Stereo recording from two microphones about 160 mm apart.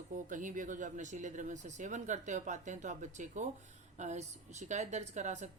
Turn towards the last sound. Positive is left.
turn(degrees=-45)  # may be behind; listen again after turning